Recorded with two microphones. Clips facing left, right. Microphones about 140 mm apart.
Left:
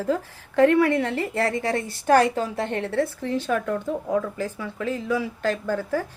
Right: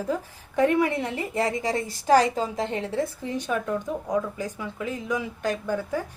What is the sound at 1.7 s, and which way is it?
Speech, 60° left (ahead or behind).